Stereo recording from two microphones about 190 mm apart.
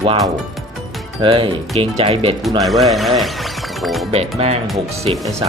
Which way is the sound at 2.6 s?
Centre (ahead or behind).